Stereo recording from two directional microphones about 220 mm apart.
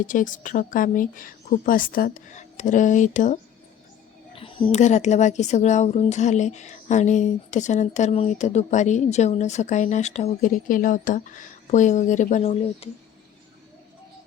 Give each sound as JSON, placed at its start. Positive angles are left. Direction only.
{"t": 0.0, "sound": "speech", "side_deg": 35}
{"t": 4.4, "sound": "speech", "side_deg": 25}